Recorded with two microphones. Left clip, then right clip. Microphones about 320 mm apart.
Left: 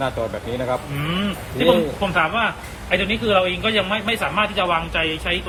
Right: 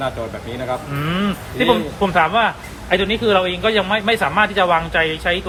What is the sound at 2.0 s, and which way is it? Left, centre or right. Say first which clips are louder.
A man's voice: right 4 dB; right.